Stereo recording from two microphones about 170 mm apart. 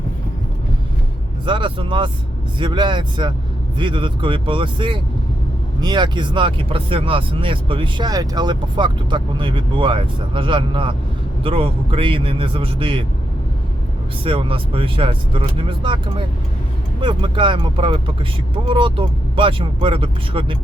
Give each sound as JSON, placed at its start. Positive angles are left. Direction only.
{"t": 1.5, "sound": "speech", "side_deg": -30}
{"t": 14.3, "sound": "speech", "side_deg": -30}